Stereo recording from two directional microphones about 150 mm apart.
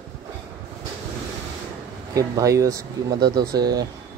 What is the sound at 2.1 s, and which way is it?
Speech, 20° right (ahead or behind).